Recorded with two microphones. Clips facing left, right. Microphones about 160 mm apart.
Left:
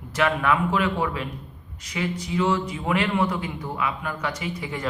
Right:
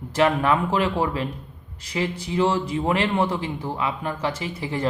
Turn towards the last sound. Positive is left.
turn(degrees=-30)  # may be behind; listen again after turning